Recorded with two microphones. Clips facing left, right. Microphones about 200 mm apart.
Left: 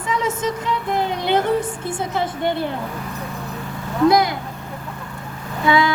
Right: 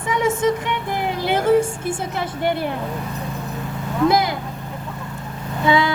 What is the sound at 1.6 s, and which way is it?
Music, 25° right (ahead or behind).